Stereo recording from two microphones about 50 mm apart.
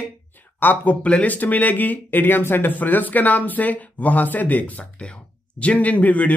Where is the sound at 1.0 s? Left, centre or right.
Left.